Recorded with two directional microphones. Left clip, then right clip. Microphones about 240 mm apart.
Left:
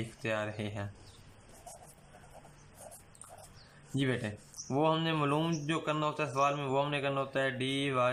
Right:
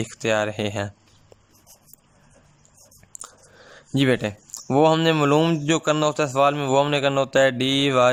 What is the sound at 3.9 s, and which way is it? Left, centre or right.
Speech, right.